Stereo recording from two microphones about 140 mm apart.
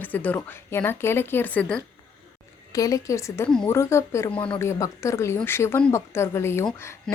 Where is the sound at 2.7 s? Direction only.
25° left (ahead or behind).